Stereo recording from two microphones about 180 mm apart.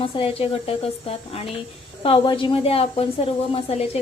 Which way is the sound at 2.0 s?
30° left (ahead or behind).